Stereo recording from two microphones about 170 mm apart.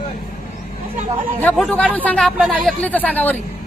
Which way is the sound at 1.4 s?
5° left (ahead or behind).